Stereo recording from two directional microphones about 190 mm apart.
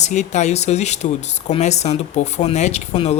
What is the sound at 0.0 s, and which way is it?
Speech, 35° left (ahead or behind).